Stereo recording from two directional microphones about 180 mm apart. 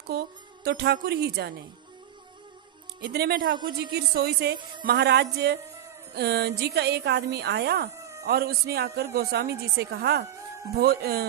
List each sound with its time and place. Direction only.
0.1 s speech: 60° right (ahead or behind)
3.0 s speech: 65° right (ahead or behind)